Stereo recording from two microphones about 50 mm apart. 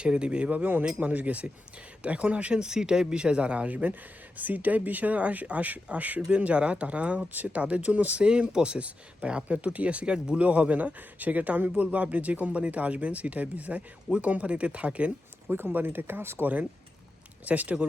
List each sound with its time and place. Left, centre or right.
0.0 s speech: centre
15.4 s speech: right
17.4 s speech: right